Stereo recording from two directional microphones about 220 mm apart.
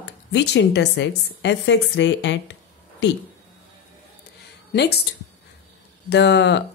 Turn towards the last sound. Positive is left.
turn(degrees=50)  # may be behind; listen again after turning